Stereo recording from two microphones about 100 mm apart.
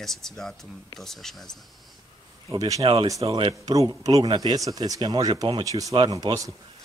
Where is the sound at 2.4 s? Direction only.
35° right (ahead or behind).